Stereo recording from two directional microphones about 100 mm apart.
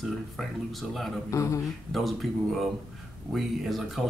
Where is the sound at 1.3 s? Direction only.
30° left (ahead or behind).